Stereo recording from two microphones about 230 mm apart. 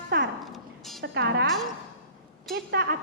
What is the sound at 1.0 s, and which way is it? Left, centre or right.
Speech, right.